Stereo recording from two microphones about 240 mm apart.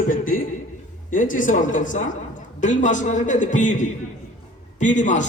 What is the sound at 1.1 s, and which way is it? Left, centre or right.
A man's voice, left.